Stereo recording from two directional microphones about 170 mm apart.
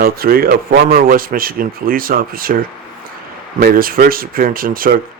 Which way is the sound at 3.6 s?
60° right (ahead or behind).